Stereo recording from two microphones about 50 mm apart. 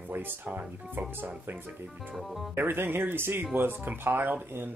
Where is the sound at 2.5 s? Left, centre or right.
Right.